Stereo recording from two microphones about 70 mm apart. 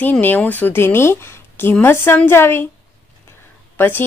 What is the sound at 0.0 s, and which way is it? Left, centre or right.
Speech, left.